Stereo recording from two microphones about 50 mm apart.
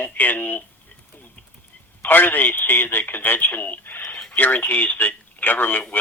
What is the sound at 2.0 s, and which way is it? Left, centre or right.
A man's voice, left.